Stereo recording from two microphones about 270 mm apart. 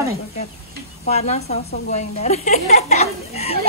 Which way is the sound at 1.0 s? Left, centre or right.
Left.